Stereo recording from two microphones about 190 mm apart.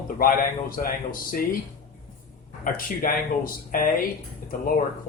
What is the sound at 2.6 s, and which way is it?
Speech, 45° left (ahead or behind).